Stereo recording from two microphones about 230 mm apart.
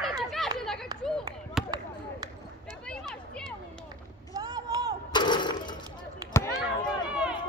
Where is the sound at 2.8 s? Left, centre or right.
Centre.